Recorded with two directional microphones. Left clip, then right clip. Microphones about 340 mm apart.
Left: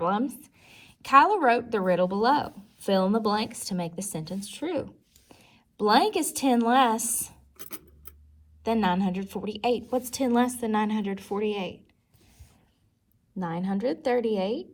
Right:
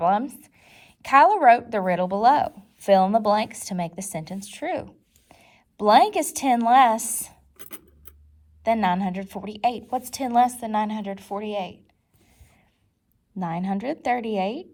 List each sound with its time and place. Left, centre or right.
0.0 s a woman's voice: centre
8.6 s a woman's voice: centre
13.4 s a woman's voice: centre